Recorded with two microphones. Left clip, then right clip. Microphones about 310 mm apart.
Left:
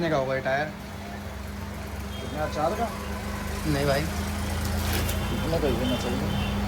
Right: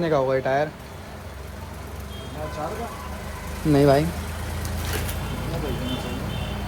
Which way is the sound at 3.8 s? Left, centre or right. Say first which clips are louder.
Right 8 dB; centre.